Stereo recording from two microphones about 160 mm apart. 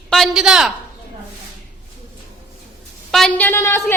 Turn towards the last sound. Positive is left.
turn(degrees=15)  # may be behind; listen again after turning